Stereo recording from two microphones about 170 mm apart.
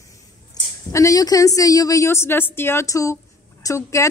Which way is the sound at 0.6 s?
25° left (ahead or behind).